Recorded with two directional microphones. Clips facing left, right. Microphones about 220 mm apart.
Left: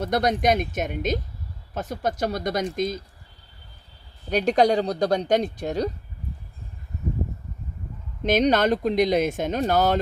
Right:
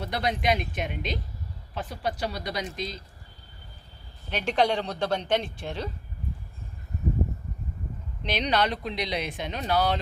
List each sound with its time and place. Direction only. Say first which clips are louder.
0.0 s speech: left 6 dB; 45° left (ahead or behind)
4.3 s speech: left 6 dB; 40° left (ahead or behind)
8.2 s speech: left 7 dB; 45° left (ahead or behind)